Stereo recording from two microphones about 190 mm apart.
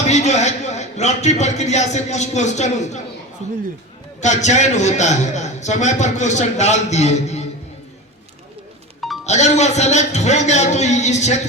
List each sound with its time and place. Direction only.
0.1 s a man's voice: 35° left (ahead or behind)
4.2 s a man's voice: 40° left (ahead or behind)
9.2 s a man's voice: 35° left (ahead or behind)